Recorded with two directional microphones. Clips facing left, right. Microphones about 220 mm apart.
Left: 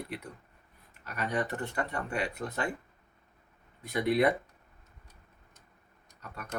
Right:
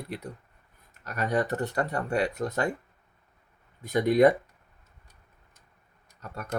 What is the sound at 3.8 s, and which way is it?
Speech, 45° right (ahead or behind).